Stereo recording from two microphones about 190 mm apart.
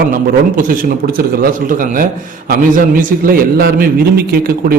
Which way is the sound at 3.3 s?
50° right (ahead or behind).